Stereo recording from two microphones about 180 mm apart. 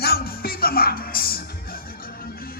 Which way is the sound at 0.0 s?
60° left (ahead or behind).